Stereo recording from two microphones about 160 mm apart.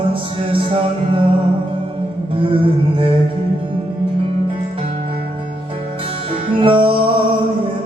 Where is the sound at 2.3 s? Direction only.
35° right (ahead or behind).